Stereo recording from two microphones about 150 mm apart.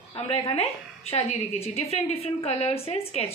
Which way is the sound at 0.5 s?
40° left (ahead or behind).